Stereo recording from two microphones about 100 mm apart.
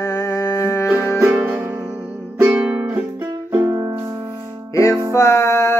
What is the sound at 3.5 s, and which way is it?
Music, 20° right (ahead or behind).